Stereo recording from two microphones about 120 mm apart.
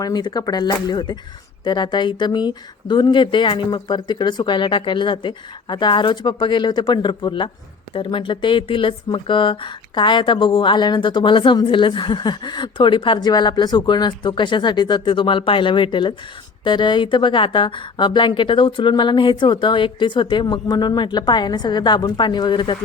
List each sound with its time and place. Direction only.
0.0 s speech: 35° left (ahead or behind)